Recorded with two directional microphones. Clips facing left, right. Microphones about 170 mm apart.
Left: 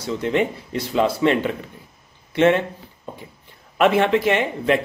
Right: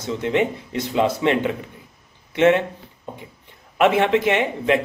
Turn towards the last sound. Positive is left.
turn(degrees=-20)  # may be behind; listen again after turning